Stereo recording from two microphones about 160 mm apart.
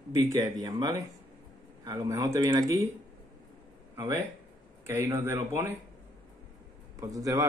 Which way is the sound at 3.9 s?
20° right (ahead or behind).